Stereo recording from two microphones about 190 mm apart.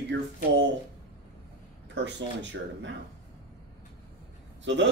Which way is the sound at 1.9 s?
70° right (ahead or behind).